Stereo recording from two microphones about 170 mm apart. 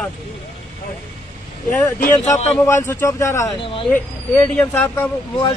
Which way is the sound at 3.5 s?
30° left (ahead or behind).